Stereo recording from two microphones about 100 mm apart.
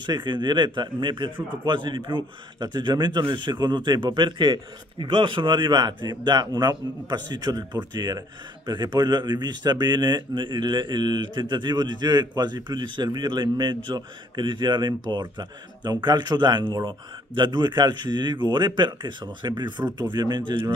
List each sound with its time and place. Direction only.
0.0 s speech: 50° right (ahead or behind)